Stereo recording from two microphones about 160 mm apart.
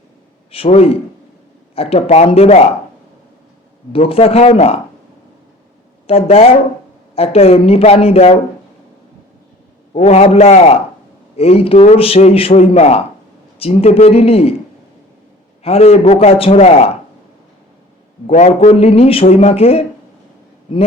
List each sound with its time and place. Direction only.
0.5 s a man's voice: 35° left (ahead or behind)
3.9 s a man's voice: 40° left (ahead or behind)
6.2 s a man's voice: 40° left (ahead or behind)
9.9 s a man's voice: 40° left (ahead or behind)
15.6 s a man's voice: 40° left (ahead or behind)
18.3 s a man's voice: 45° left (ahead or behind)